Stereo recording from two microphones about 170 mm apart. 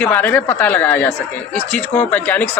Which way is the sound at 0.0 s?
10° left (ahead or behind).